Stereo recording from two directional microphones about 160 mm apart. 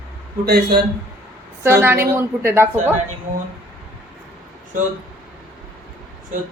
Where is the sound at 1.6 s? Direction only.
15° right (ahead or behind).